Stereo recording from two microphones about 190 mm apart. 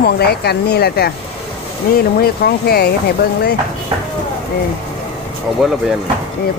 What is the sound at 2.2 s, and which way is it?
Speech, 55° left (ahead or behind).